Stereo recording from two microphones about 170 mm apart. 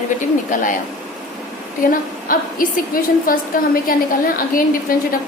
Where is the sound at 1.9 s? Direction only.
55° left (ahead or behind).